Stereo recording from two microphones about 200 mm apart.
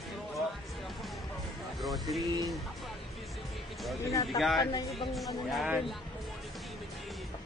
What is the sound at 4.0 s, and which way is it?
Speech, 15° left (ahead or behind).